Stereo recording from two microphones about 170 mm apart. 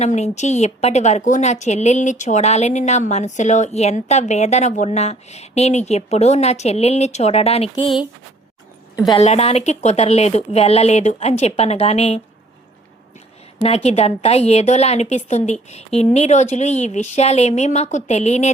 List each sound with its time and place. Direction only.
0.0 s a woman's voice: 40° left (ahead or behind)
9.0 s a woman's voice: 35° left (ahead or behind)
13.6 s a woman's voice: 35° left (ahead or behind)